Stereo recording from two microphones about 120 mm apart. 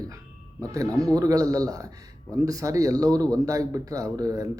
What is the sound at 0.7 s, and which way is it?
Speech, 30° right (ahead or behind).